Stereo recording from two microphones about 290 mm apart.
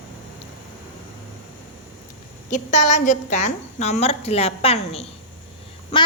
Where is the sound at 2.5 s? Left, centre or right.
Left.